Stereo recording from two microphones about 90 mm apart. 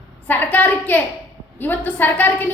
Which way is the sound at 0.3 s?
20° left (ahead or behind).